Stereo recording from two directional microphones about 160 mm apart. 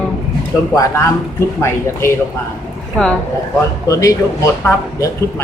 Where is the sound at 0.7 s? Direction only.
15° left (ahead or behind).